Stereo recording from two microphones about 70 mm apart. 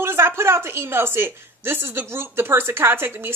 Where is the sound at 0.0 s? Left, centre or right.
Right.